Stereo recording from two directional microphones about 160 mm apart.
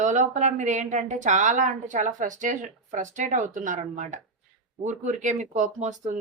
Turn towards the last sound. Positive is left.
turn(degrees=-45)  # may be behind; listen again after turning